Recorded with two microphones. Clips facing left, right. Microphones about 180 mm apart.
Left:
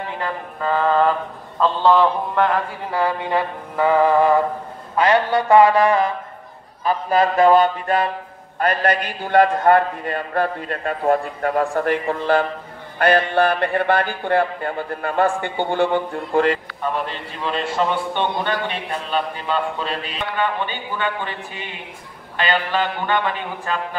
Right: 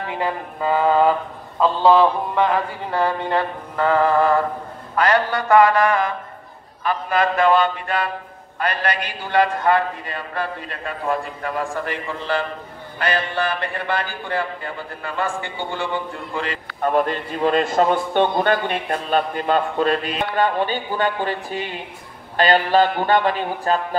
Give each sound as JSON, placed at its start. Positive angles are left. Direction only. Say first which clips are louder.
{"t": 0.2, "sound": "mantra", "louder": "right 3 dB", "side_deg": -10}
{"t": 1.6, "sound": "speech", "louder": "right 1 dB", "side_deg": -5}
{"t": 4.9, "sound": "music", "louder": "left 2 dB", "side_deg": 20}
{"t": 6.8, "sound": "a man's voice", "louder": "left 2 dB", "side_deg": 35}
{"t": 16.8, "sound": "a man's voice", "louder": "right 7 dB", "side_deg": -45}